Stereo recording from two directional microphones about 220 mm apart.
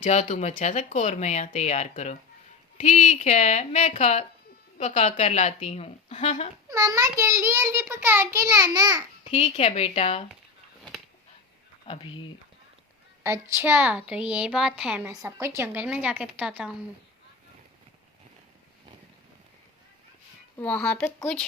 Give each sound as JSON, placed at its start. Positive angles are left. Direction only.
{"t": 0.0, "sound": "speech", "side_deg": 30}
{"t": 6.7, "sound": "a child's voice", "side_deg": -15}
{"t": 9.3, "sound": "speech", "side_deg": 30}
{"t": 13.2, "sound": "a woman's voice", "side_deg": -10}
{"t": 20.6, "sound": "a woman's voice", "side_deg": 5}